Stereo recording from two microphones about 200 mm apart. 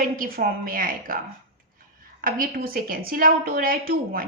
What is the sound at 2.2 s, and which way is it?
A woman's voice, 45° right (ahead or behind).